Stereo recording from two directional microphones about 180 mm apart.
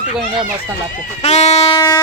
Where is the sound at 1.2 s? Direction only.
35° left (ahead or behind).